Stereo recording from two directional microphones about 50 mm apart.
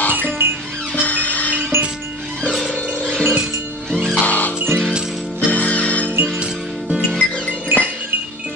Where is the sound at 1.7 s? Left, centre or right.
Right.